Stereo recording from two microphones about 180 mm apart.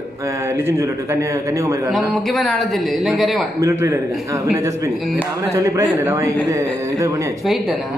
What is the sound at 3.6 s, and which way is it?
Speech, 15° right (ahead or behind).